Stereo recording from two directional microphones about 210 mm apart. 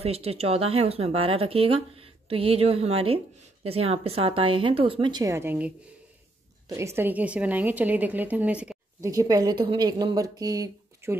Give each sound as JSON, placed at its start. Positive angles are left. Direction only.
{"t": 0.0, "sound": "speech", "side_deg": -30}
{"t": 6.7, "sound": "a woman's voice", "side_deg": -15}
{"t": 9.1, "sound": "a woman's voice", "side_deg": -15}